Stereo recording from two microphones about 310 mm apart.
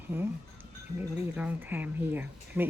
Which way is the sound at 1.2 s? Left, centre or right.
Centre.